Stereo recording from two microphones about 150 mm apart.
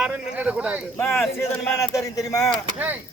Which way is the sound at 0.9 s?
15° left (ahead or behind).